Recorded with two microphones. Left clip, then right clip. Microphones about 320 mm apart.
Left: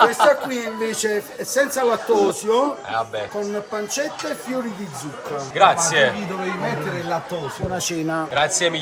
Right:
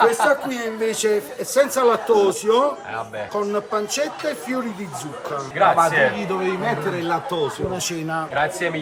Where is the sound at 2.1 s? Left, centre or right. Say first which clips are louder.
Right 1 dB; centre.